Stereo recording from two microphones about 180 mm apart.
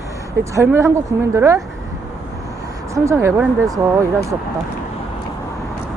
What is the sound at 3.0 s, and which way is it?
Speech, 15° right (ahead or behind).